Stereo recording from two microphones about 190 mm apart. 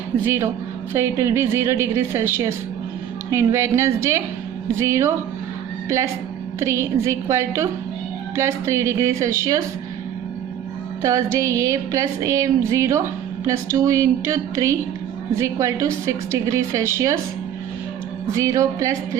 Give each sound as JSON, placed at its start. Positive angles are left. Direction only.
{"t": 0.9, "sound": "music", "side_deg": -15}
{"t": 6.6, "sound": "music", "side_deg": -15}
{"t": 11.0, "sound": "music", "side_deg": -15}
{"t": 18.3, "sound": "music", "side_deg": -15}